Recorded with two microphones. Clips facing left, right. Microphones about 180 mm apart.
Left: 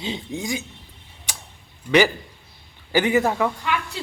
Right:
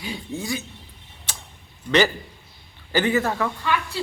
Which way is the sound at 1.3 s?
15° left (ahead or behind).